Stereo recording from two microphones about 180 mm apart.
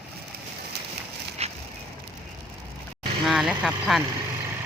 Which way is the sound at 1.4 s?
35° right (ahead or behind).